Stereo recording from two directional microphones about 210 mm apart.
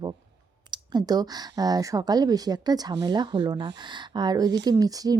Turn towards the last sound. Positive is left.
turn(degrees=-15)  # may be behind; listen again after turning